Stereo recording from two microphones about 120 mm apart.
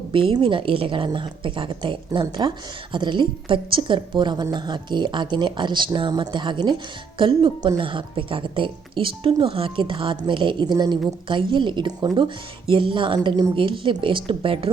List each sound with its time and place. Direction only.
0.1 s speech: 45° right (ahead or behind)